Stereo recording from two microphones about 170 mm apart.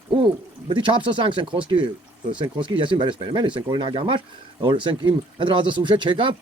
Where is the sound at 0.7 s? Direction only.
30° right (ahead or behind).